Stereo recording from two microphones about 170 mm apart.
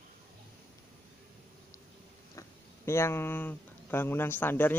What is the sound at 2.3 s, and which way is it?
Speech, 15° left (ahead or behind).